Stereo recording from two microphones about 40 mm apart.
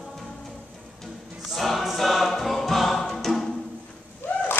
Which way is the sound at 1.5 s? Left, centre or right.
Centre.